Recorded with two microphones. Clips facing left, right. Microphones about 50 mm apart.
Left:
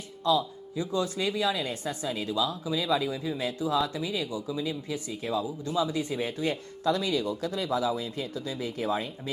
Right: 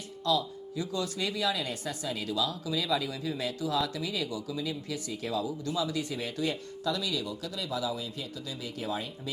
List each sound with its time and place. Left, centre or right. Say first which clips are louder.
0.3 s speech: left 3 dB; left